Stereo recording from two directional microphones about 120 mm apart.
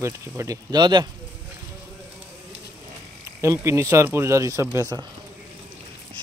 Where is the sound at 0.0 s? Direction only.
25° right (ahead or behind).